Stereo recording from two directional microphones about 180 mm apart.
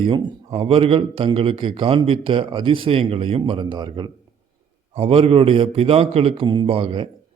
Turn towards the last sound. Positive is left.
turn(degrees=-30)  # may be behind; listen again after turning